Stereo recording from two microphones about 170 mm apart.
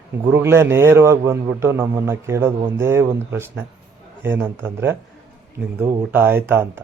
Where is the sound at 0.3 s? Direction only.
15° right (ahead or behind).